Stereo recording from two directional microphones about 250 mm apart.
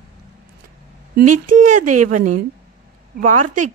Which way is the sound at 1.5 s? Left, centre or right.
Right.